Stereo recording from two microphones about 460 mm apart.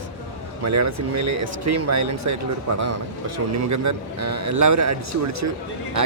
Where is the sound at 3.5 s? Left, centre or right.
Right.